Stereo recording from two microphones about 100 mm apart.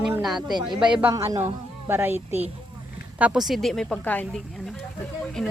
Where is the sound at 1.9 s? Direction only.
20° right (ahead or behind).